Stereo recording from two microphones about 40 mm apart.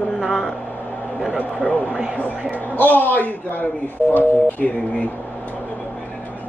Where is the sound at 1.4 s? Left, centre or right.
Left.